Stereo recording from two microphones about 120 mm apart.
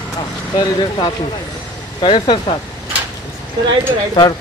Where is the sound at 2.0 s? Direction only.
45° left (ahead or behind).